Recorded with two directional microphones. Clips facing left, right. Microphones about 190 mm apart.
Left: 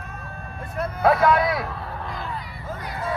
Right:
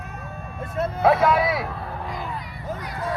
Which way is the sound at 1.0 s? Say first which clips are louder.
Even; centre (ahead or behind).